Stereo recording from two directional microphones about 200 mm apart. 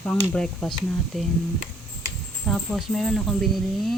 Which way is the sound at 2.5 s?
5° left (ahead or behind).